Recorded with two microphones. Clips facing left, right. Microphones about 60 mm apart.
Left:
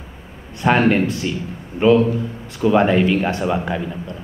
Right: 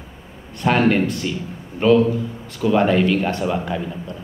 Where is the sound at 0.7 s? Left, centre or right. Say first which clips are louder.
Left 1 dB; centre.